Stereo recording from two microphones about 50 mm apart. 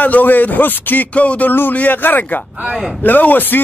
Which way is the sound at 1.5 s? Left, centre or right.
Left.